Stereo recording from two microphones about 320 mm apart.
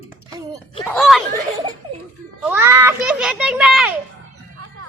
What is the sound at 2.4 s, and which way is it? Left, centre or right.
A child's voice, centre.